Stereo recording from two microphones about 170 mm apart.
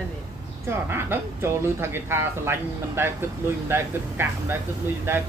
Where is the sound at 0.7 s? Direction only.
15° right (ahead or behind).